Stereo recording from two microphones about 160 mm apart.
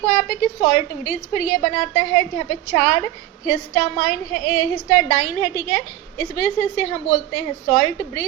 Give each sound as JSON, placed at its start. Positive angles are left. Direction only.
{"t": 0.3, "sound": "a woman's voice", "side_deg": 45}
{"t": 4.7, "sound": "a woman's voice", "side_deg": 30}